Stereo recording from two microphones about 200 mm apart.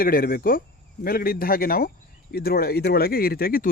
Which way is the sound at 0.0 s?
45° left (ahead or behind).